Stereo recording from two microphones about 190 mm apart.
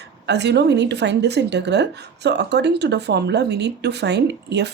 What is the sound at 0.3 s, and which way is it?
A woman's voice, 65° right (ahead or behind).